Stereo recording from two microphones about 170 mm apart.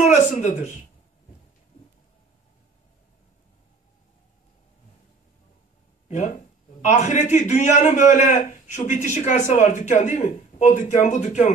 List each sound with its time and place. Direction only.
0.0 s speech: 45° left (ahead or behind)
6.0 s a man's voice: 45° left (ahead or behind)